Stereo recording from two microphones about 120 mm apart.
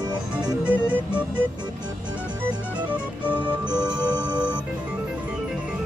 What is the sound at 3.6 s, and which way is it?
Music, 35° right (ahead or behind).